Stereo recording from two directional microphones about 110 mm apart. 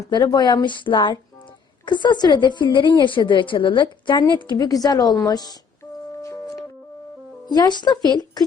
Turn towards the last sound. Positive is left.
turn(degrees=40)  # may be behind; listen again after turning